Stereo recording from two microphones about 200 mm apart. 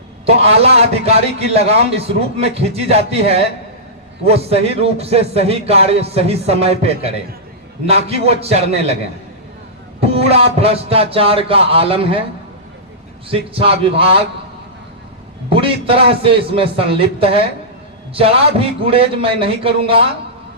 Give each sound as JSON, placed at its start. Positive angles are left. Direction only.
{"t": 0.3, "sound": "a man's voice", "side_deg": -30}
{"t": 10.0, "sound": "speech", "side_deg": -30}
{"t": 13.3, "sound": "speech", "side_deg": -25}
{"t": 15.4, "sound": "speech", "side_deg": -25}